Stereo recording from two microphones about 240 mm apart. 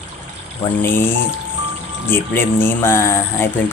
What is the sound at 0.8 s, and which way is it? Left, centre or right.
Speech, centre.